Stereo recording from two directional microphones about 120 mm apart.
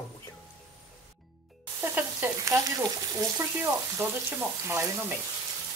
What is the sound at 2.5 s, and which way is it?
Speech, 30° right (ahead or behind).